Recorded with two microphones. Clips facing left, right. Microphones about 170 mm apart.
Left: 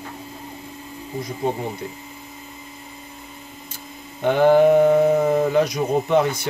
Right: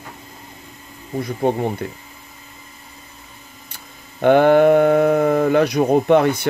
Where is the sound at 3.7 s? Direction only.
65° right (ahead or behind).